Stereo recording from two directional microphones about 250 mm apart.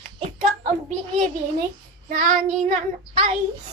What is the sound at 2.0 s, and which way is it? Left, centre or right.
Child singing, right.